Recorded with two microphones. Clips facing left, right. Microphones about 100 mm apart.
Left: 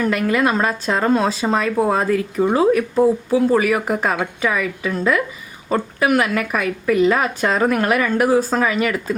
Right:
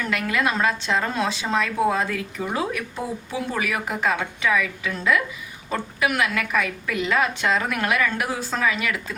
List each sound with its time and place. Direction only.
0.0 s speech: 40° left (ahead or behind)